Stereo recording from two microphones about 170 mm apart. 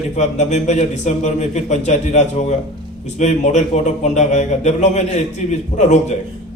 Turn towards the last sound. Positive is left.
turn(degrees=45)  # may be behind; listen again after turning